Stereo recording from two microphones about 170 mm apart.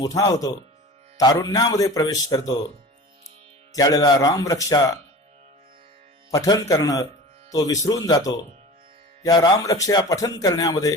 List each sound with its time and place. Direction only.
0.0 s a man's voice: 20° left (ahead or behind)
6.3 s a man's voice: 20° left (ahead or behind)